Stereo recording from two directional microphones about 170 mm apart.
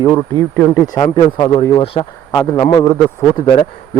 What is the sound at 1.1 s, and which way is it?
A man's voice, 25° left (ahead or behind).